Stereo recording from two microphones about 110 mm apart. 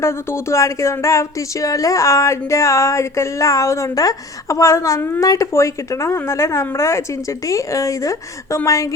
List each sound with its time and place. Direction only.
0.0 s speech: 25° left (ahead or behind)